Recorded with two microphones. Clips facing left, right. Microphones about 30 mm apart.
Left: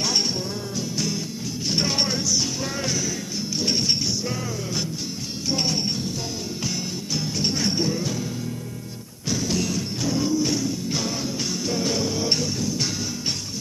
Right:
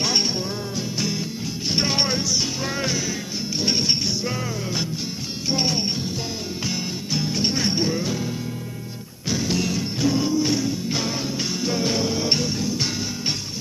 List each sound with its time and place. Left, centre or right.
0.7 s music: right
5.5 s music: centre
7.2 s music: right
9.3 s music: centre